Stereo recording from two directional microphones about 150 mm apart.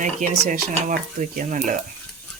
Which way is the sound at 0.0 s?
60° right (ahead or behind).